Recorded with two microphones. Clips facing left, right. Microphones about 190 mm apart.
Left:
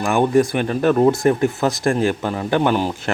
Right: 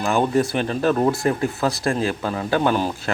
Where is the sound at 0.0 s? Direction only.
15° left (ahead or behind).